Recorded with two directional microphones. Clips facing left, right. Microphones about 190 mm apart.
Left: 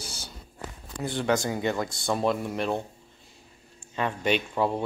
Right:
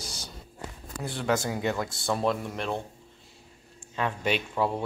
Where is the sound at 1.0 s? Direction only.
Centre (ahead or behind).